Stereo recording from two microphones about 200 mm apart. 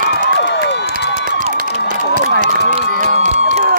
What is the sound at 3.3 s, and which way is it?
Music, 40° right (ahead or behind).